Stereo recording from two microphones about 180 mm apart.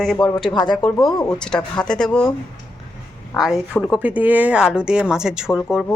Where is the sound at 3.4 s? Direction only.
Centre (ahead or behind).